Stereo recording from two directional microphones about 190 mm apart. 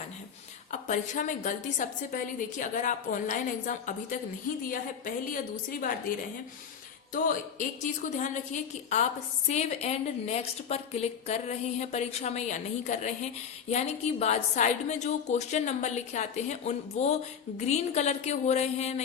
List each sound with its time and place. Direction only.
0.7 s a woman's voice: 40° left (ahead or behind)
7.6 s a woman's voice: 40° left (ahead or behind)